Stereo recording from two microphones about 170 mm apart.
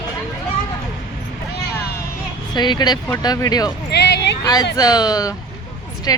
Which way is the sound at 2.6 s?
25° left (ahead or behind).